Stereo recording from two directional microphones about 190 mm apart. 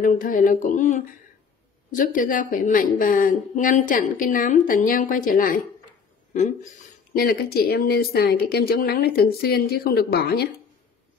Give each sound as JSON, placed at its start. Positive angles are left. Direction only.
{"t": 0.0, "sound": "a woman's voice", "side_deg": 45}
{"t": 7.2, "sound": "a woman's voice", "side_deg": 50}